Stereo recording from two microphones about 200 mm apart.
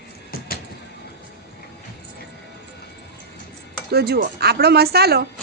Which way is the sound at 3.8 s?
55° right (ahead or behind).